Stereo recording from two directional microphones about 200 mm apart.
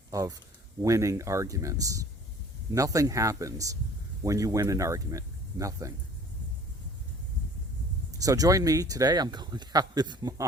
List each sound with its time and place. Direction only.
0.1 s speech: 15° right (ahead or behind)
8.2 s speech: 15° right (ahead or behind)